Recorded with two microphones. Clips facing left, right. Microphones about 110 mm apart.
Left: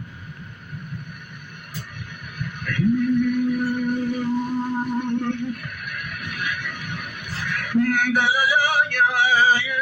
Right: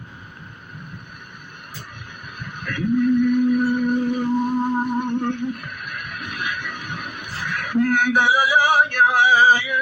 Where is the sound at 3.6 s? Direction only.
25° right (ahead or behind).